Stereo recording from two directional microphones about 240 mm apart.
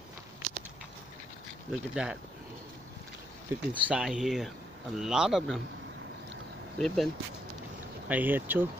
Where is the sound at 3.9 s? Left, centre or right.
Centre.